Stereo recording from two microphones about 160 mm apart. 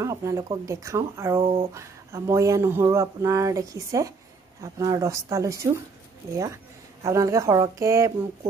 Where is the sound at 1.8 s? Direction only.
15° right (ahead or behind).